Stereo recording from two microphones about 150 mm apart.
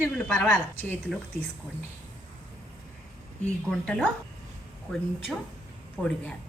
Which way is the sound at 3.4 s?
5° left (ahead or behind).